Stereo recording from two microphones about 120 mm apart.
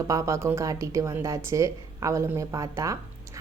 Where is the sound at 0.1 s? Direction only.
25° right (ahead or behind).